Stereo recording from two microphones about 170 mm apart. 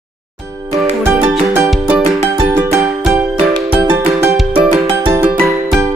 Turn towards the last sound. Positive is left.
turn(degrees=-15)  # may be behind; listen again after turning